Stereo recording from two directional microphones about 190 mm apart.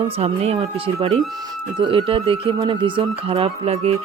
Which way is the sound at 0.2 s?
30° right (ahead or behind).